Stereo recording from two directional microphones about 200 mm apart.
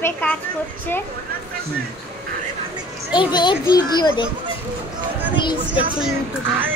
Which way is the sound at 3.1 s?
20° left (ahead or behind).